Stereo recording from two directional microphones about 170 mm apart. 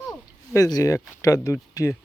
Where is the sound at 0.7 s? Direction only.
20° left (ahead or behind).